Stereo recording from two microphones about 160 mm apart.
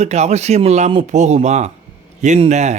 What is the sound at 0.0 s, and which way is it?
Speech, 45° right (ahead or behind).